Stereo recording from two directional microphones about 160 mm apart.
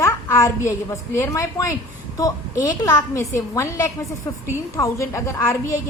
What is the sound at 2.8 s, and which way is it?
Speech, 20° left (ahead or behind).